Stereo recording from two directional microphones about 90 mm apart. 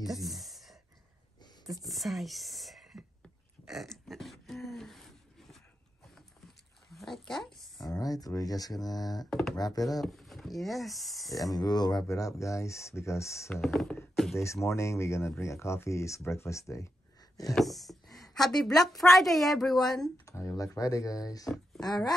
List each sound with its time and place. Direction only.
0.0 s a sound: centre (ahead or behind)
1.9 s speech: centre (ahead or behind)
3.6 s a sound: centre (ahead or behind)
6.9 s a sound: centre (ahead or behind)
7.8 s speech: 40° left (ahead or behind)
9.3 s speech: 5° left (ahead or behind)
9.6 s speech: 45° left (ahead or behind)
9.8 s speech: centre (ahead or behind)
11.3 s speech: 45° left (ahead or behind)
13.6 s speech: centre (ahead or behind)
14.3 s speech: 30° left (ahead or behind)
17.6 s a woman's voice: centre (ahead or behind)
20.2 s speech: 35° left (ahead or behind)